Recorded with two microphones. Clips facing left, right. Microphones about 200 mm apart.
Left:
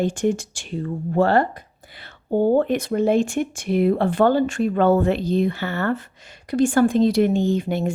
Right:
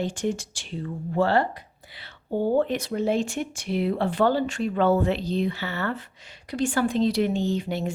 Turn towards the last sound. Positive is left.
turn(degrees=50)  # may be behind; listen again after turning